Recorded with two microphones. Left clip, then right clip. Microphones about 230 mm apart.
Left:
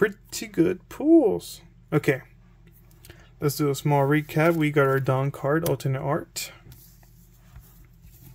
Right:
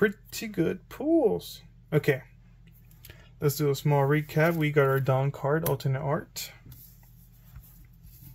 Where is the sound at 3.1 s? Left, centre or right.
Centre; by 6.5 s left.